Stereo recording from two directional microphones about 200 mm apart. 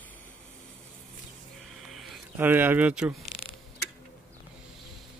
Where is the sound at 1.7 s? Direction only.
Centre (ahead or behind).